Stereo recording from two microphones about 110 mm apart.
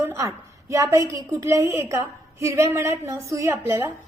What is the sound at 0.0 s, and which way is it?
A woman's voice, 25° right (ahead or behind).